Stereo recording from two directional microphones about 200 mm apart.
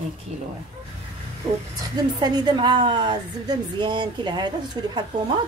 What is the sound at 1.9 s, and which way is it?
Speech, 20° right (ahead or behind).